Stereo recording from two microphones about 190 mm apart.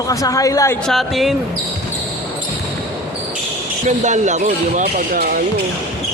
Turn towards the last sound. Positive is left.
turn(degrees=-50)  # may be behind; listen again after turning